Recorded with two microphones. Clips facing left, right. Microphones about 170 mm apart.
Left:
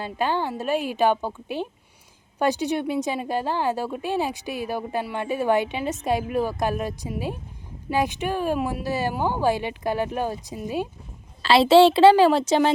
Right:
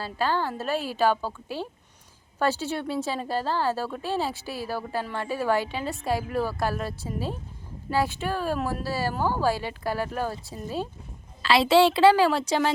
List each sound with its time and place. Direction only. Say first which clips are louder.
0.0 s a woman's voice: left 2 dB; 20° left (ahead or behind)
11.4 s a woman's voice: left 5 dB; 25° left (ahead or behind)